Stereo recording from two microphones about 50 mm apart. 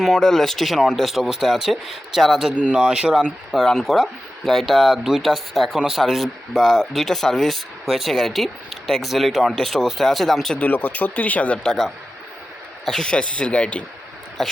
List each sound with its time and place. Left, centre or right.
0.2 s speech: centre
2.6 s speech: right
3.5 s speech: centre
10.5 s speech: left
12.8 s speech: centre
13.1 s speech: left